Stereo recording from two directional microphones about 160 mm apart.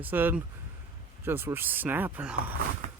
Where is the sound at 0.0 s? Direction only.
10° right (ahead or behind).